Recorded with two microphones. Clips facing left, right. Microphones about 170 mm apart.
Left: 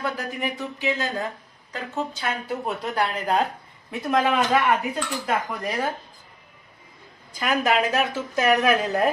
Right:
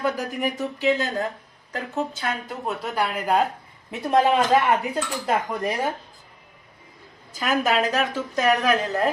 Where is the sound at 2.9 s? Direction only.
10° right (ahead or behind).